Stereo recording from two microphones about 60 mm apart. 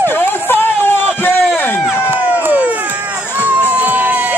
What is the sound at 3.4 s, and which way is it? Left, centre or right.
Crowd, right.